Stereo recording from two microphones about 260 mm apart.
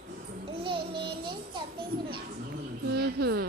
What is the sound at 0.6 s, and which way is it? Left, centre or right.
Child singing, centre.